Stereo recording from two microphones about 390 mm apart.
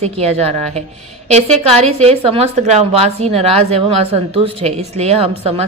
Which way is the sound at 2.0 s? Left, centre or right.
Centre.